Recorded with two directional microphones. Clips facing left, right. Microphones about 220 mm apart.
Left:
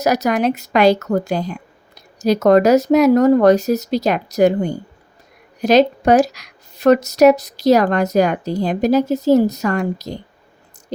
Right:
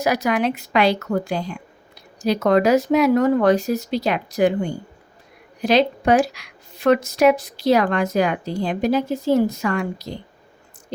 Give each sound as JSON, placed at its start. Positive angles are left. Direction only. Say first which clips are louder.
{"t": 0.0, "sound": "a woman's voice", "louder": "left 3 dB", "side_deg": 40}